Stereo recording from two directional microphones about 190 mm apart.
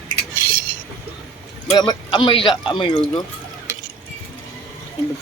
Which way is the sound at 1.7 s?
20° left (ahead or behind).